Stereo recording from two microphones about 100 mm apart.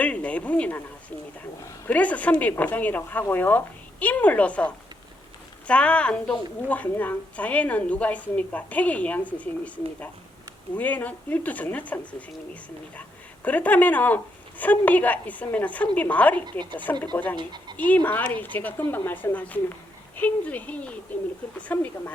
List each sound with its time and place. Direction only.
0.0 s a sound: 15° left (ahead or behind)
1.9 s a woman's voice: 15° left (ahead or behind)
13.0 s a woman's voice: 15° left (ahead or behind)
17.3 s speech: 45° right (ahead or behind)
17.7 s a woman's voice: 15° left (ahead or behind)